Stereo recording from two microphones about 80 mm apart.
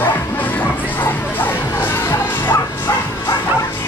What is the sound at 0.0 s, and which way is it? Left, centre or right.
Music, left.